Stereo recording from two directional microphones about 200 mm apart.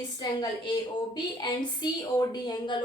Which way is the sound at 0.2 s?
20° left (ahead or behind).